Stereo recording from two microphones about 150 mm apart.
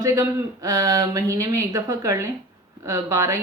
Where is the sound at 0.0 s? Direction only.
20° right (ahead or behind).